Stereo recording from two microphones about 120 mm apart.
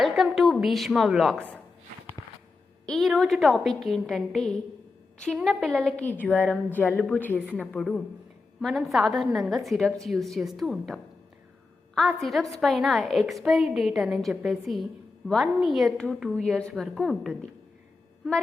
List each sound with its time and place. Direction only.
0.0 s a sound: centre (ahead or behind)
2.2 s walk: 30° left (ahead or behind)
2.8 s a woman's voice: centre (ahead or behind)